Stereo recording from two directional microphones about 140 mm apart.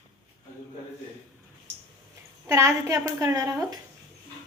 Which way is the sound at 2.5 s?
20° right (ahead or behind).